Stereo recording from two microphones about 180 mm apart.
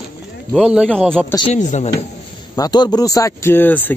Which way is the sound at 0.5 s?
5° right (ahead or behind).